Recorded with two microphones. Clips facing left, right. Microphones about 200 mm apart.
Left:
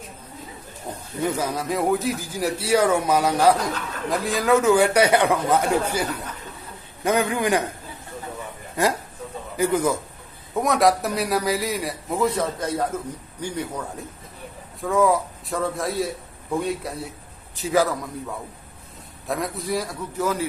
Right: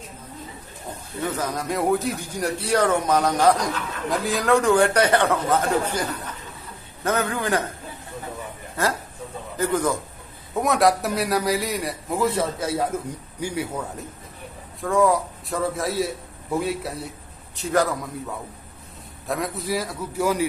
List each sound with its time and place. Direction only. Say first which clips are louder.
1.2 s speech: left 2 dB; 10° left (ahead or behind)
8.7 s a man's voice: left 3 dB; 15° left (ahead or behind); by 18.1 s centre (ahead or behind)
19.3 s a man's voice: even; centre (ahead or behind)